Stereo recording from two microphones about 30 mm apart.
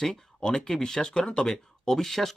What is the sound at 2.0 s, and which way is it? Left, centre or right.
Speech, centre.